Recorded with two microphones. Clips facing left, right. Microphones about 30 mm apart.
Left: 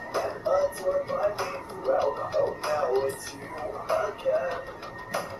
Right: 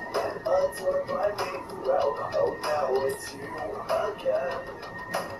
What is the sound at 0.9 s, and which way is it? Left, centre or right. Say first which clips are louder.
Music: even; centre.